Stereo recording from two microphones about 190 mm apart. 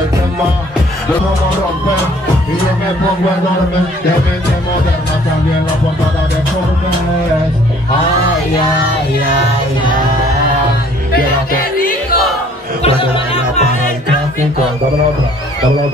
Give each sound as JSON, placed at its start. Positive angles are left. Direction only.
{"t": 12.8, "sound": "music", "side_deg": 30}